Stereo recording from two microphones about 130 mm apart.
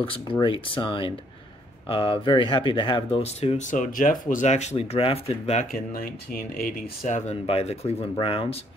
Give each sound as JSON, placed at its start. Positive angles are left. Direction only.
{"t": 0.0, "sound": "speech", "side_deg": 40}
{"t": 6.3, "sound": "speech", "side_deg": 80}